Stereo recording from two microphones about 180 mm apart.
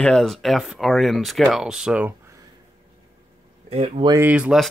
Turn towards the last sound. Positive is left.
turn(degrees=-5)  # may be behind; listen again after turning